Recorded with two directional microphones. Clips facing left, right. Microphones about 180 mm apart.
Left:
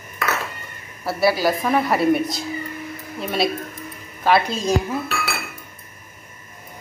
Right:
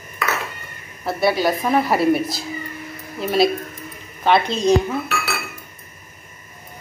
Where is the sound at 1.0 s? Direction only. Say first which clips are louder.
Even; 5° left (ahead or behind).